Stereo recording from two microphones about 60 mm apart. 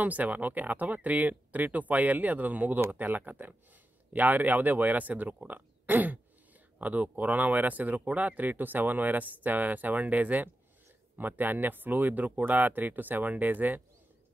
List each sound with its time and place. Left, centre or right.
0.0 s speech: right